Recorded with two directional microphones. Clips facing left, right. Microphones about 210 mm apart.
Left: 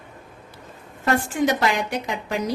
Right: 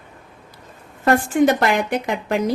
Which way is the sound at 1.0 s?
55° right (ahead or behind).